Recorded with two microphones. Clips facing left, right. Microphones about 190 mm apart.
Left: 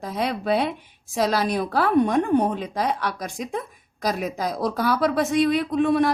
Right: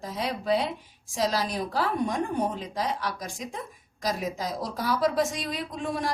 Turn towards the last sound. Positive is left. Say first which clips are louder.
# left 11 dB
turn(degrees=65)  # may be behind; listen again after turning